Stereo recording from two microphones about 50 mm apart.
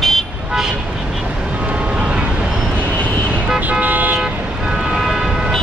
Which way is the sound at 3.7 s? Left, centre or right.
Right.